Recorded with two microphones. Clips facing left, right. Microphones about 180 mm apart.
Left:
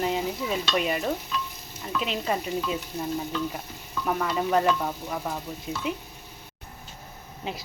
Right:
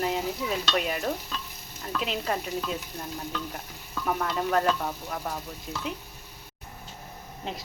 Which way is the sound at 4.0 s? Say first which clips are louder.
Left 2 dB; centre (ahead or behind).